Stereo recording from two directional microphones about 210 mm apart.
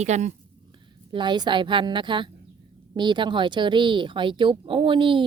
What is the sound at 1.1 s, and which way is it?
Speech, 20° right (ahead or behind).